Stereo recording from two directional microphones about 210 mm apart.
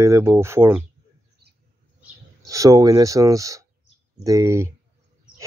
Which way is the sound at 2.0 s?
15° right (ahead or behind).